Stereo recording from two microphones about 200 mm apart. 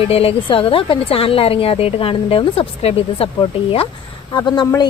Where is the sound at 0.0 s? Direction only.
30° left (ahead or behind).